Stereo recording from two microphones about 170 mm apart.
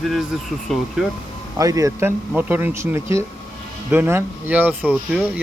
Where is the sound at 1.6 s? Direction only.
20° right (ahead or behind).